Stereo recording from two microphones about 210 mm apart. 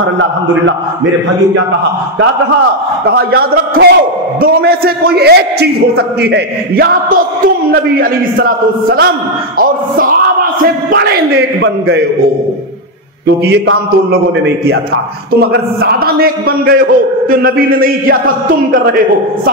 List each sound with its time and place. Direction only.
0.0 s a man's voice: 65° right (ahead or behind)
3.1 s a man's voice: 50° right (ahead or behind)
9.6 s music: 40° right (ahead or behind)
10.6 s a man's voice: 45° right (ahead or behind)
13.5 s a man's voice: 55° right (ahead or behind)